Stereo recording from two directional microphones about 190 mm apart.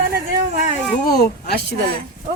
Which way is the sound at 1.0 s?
55° left (ahead or behind).